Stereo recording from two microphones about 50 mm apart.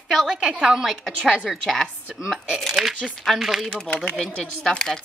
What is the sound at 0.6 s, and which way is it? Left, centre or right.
Speech, centre.